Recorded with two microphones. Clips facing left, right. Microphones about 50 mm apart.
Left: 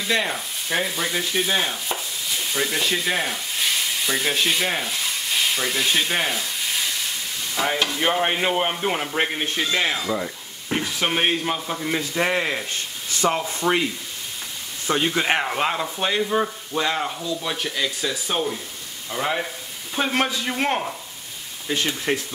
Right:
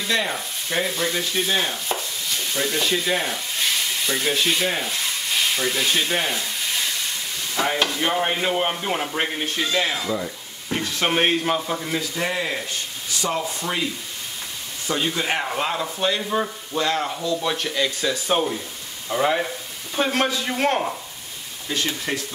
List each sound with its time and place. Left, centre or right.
0.0 s speech: centre
9.9 s stir: centre
11.1 s speech: centre
12.0 s speech: left
15.1 s speech: left
15.5 s speech: centre
17.4 s speech: centre
18.3 s speech: centre
19.1 s speech: centre
20.0 s speech: centre
21.7 s speech: centre